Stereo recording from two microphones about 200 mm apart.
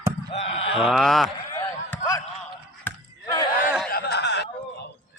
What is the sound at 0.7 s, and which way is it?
Speech, centre (ahead or behind).